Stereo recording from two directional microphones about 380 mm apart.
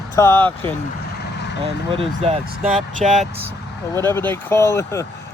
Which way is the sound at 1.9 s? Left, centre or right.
Centre.